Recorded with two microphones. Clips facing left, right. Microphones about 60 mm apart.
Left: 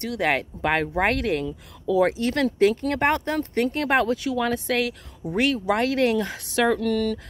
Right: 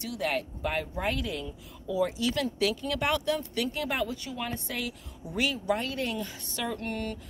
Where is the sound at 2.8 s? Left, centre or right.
Left.